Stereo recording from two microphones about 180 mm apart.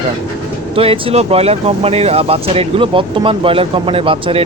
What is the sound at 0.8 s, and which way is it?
Speech, 30° right (ahead or behind).